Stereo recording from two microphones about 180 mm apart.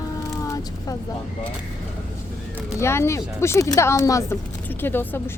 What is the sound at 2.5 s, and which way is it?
Speech, 15° left (ahead or behind).